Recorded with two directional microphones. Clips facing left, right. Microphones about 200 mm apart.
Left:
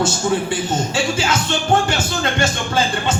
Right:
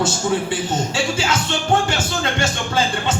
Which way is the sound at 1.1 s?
50° left (ahead or behind).